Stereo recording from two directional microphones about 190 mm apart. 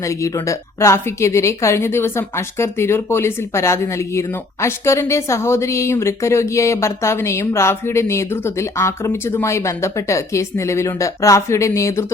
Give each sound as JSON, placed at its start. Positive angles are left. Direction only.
{"t": 0.2, "sound": "a woman's voice", "side_deg": 15}